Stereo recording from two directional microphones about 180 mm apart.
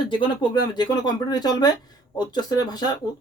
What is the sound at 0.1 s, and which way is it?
Speech, 25° left (ahead or behind).